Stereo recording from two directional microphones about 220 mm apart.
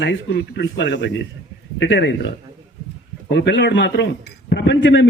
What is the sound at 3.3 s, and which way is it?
A man's voice, 50° left (ahead or behind).